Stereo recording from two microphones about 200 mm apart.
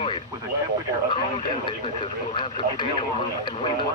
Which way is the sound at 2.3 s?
25° left (ahead or behind).